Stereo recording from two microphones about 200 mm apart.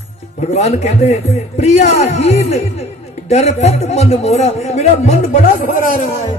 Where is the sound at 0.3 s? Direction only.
35° left (ahead or behind).